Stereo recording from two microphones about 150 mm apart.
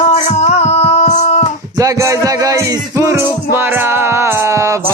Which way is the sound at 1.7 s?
20° right (ahead or behind).